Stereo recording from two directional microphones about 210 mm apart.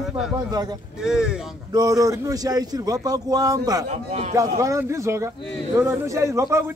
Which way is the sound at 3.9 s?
35° right (ahead or behind).